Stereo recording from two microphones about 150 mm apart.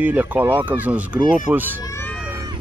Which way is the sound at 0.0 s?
10° right (ahead or behind).